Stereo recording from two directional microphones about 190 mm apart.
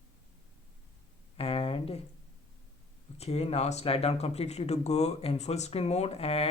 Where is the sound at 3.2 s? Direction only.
35° left (ahead or behind).